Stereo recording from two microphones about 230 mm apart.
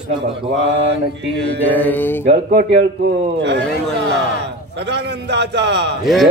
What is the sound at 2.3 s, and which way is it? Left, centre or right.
A man's voice, right.